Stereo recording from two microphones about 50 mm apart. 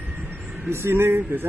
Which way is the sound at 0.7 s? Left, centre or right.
Right.